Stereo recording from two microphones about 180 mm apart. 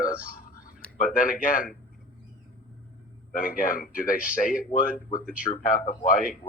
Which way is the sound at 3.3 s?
50° left (ahead or behind).